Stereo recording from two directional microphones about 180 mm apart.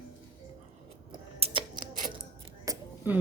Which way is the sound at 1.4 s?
35° right (ahead or behind).